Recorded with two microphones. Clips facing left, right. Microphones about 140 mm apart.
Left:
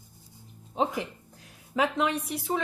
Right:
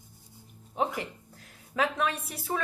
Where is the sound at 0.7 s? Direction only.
20° left (ahead or behind).